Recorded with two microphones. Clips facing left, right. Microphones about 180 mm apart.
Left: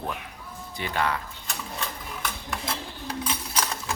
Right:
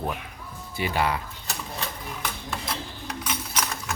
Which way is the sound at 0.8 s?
10° right (ahead or behind).